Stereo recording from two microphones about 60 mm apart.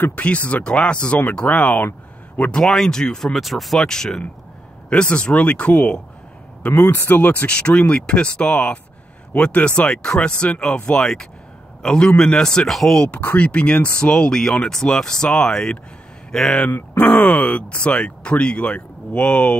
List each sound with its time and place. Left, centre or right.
0.0 s speech: left
2.6 s speech: centre
3.3 s speech: centre; by 5.9 s left
6.6 s a man's voice: left; by 13.1 s centre
13.1 s speech: left; by 16.6 s centre
16.6 s speech: left